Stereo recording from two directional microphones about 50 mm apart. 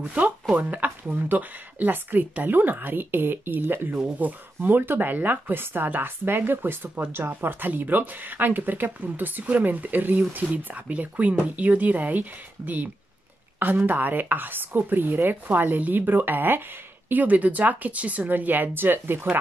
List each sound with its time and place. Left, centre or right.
0.0 s speech: right
4.2 s speech: right
17.1 s speech: right